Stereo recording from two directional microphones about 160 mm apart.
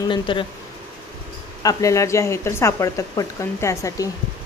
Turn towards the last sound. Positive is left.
turn(degrees=20)  # may be behind; listen again after turning